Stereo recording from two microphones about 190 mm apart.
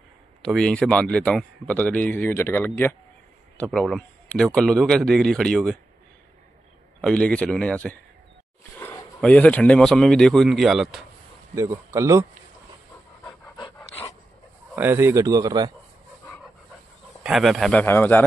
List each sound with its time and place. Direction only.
0.4 s speech: 5° left (ahead or behind)
7.0 s speech: 5° left (ahead or behind)
11.5 s speech: 15° right (ahead or behind)
13.7 s dog: 10° left (ahead or behind)
14.8 s speech: 10° right (ahead or behind)
17.2 s speech: centre (ahead or behind)